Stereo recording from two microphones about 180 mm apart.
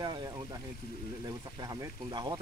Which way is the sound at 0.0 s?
20° right (ahead or behind).